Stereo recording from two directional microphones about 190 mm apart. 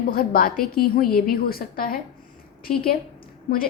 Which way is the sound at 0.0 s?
50° left (ahead or behind).